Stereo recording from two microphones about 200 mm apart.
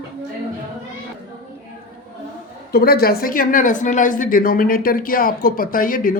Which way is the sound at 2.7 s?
50° left (ahead or behind).